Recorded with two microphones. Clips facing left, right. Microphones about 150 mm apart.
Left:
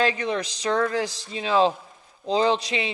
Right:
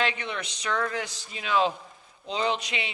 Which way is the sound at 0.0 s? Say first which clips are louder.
Left 6 dB; 35° left (ahead or behind).